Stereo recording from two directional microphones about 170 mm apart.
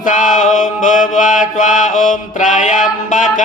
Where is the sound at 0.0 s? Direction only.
50° left (ahead or behind).